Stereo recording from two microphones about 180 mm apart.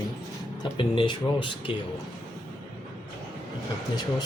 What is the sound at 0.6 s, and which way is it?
Speech, 30° left (ahead or behind).